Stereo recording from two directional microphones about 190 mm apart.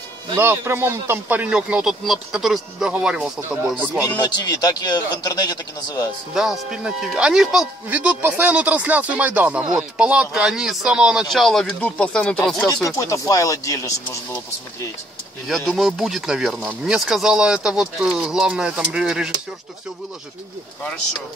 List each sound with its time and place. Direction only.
0.4 s speech: 10° right (ahead or behind)
4.2 s speech: 20° left (ahead or behind)
6.3 s speech: centre (ahead or behind)
12.8 s speech: 15° left (ahead or behind)
15.4 s speech: centre (ahead or behind)